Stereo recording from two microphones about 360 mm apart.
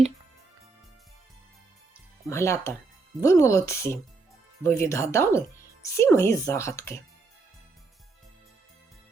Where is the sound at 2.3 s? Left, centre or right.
Centre.